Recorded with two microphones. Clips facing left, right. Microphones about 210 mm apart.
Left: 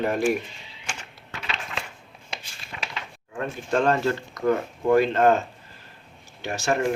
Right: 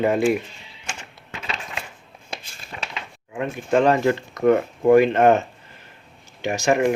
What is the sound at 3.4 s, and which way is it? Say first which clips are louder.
Speech: right 5 dB; 15° right (ahead or behind).